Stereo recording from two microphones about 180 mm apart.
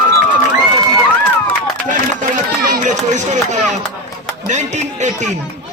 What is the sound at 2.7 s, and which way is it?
Speech, 40° right (ahead or behind).